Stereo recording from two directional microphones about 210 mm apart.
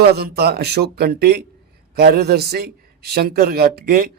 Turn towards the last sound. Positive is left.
turn(degrees=-45)  # may be behind; listen again after turning